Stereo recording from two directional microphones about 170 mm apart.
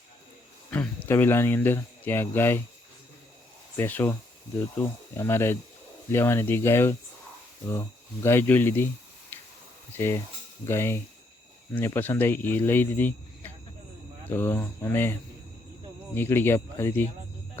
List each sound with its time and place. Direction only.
0.7 s speech: 10° left (ahead or behind)
3.8 s speech: 10° left (ahead or behind)
9.3 s a sound: 10° left (ahead or behind)
10.0 s speech: 15° left (ahead or behind)
16.1 s speech: 15° left (ahead or behind)